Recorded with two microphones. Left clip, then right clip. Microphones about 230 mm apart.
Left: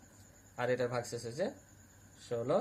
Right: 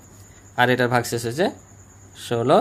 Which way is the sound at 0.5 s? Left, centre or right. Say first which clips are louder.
Right 15 dB; right.